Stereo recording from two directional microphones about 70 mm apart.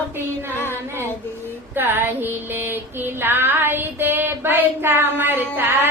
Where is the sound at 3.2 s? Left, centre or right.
Right.